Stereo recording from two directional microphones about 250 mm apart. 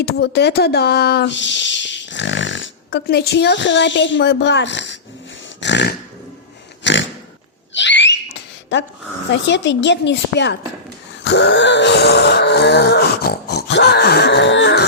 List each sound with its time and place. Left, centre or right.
0.0 s speech: left
5.5 s dog: left
6.8 s pig: left
7.7 s a sound: left
9.3 s speech: left
11.2 s wail: left